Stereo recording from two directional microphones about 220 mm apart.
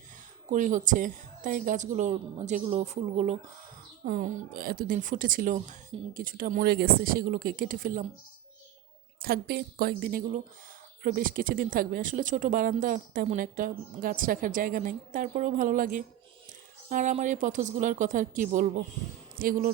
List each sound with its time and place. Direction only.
0.5 s speech: 35° right (ahead or behind)
9.1 s speech: 45° right (ahead or behind)